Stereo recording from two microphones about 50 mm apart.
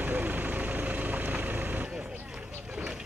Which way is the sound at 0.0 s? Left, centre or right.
Right.